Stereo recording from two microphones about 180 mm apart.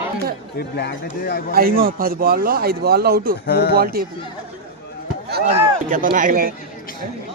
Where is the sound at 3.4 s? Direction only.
60° left (ahead or behind).